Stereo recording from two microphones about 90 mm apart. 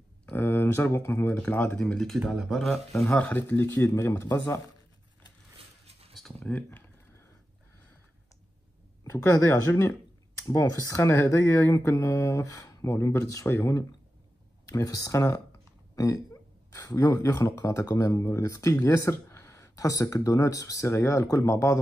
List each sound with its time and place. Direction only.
0.3 s a sound: 25° left (ahead or behind)
1.4 s speech: 20° left (ahead or behind)
1.8 s speech: 5° left (ahead or behind)
2.2 s speech: 5° right (ahead or behind)
3.2 s speech: 15° left (ahead or behind)
6.4 s speech: 20° left (ahead or behind)
9.0 s speech: 30° left (ahead or behind)
16.7 s speech: 40° left (ahead or behind)